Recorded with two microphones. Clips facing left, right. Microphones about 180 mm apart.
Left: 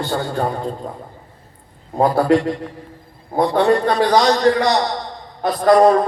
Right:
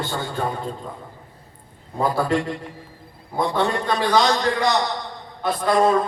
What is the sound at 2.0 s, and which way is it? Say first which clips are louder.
A man's voice: left 6 dB; 50° left (ahead or behind).